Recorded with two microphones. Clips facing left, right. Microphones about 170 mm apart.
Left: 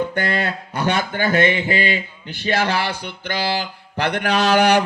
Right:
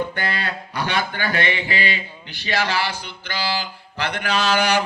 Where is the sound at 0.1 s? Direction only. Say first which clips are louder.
Left 5 dB; 45° left (ahead or behind).